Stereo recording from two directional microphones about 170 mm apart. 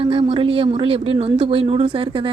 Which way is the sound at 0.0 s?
35° right (ahead or behind).